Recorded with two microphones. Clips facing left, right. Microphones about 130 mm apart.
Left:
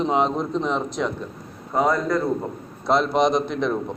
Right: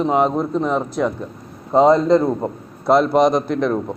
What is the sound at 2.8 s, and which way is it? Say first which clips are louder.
Speech: right 5 dB; 10° right (ahead or behind).